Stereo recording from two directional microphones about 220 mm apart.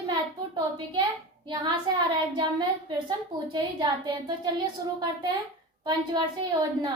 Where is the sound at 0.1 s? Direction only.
20° right (ahead or behind).